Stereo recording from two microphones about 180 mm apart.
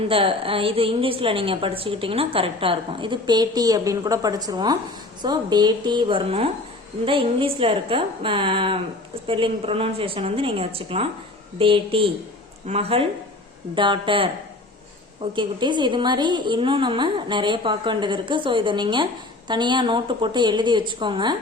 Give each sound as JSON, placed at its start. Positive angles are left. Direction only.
{"t": 0.1, "sound": "a woman's voice", "side_deg": -30}